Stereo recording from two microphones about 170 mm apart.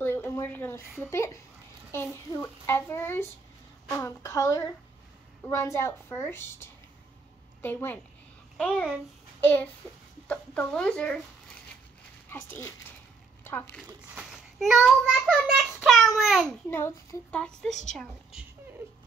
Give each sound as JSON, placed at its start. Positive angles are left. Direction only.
{"t": 0.0, "sound": "a sound", "side_deg": 15}
{"t": 1.1, "sound": "a child's voice", "side_deg": 15}
{"t": 12.3, "sound": "speech", "side_deg": 15}
{"t": 13.4, "sound": "a sound", "side_deg": 10}
{"t": 13.7, "sound": "a child's voice", "side_deg": -5}
{"t": 16.7, "sound": "a child's voice", "side_deg": 15}